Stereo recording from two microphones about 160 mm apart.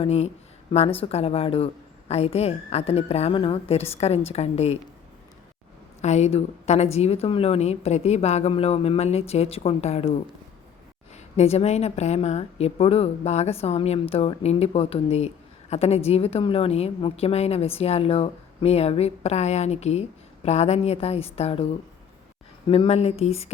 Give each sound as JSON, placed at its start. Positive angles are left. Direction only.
{"t": 0.0, "sound": "a woman's voice", "side_deg": 40}
{"t": 6.0, "sound": "a woman's voice", "side_deg": 45}
{"t": 11.3, "sound": "a woman's voice", "side_deg": 40}
{"t": 22.7, "sound": "a woman's voice", "side_deg": 40}